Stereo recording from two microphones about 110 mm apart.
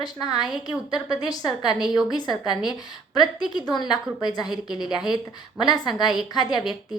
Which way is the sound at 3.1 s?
40° left (ahead or behind).